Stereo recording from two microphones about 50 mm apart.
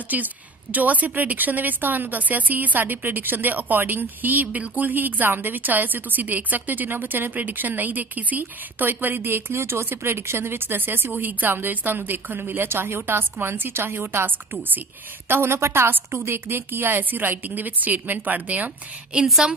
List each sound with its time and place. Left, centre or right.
0.1 s a woman's voice: right
15.2 s a woman's voice: right